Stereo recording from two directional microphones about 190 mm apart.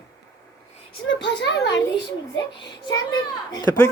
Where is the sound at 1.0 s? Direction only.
75° left (ahead or behind).